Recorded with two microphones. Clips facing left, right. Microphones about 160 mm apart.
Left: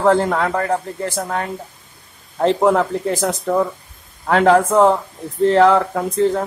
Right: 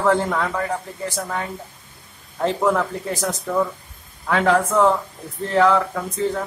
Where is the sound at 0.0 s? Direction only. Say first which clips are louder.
Left 4 dB; 60° left (ahead or behind).